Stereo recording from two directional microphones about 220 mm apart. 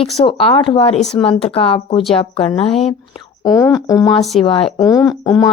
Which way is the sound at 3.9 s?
Centre (ahead or behind).